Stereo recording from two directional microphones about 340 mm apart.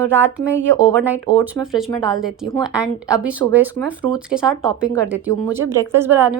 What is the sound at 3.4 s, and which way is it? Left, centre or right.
Speech, right.